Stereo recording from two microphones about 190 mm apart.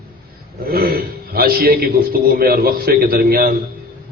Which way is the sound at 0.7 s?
55° right (ahead or behind).